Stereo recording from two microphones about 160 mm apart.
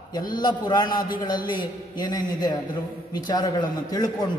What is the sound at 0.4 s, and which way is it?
A man's voice, 25° left (ahead or behind).